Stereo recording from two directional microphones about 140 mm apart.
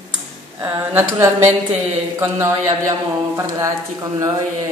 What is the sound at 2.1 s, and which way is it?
A man's voice, 20° right (ahead or behind).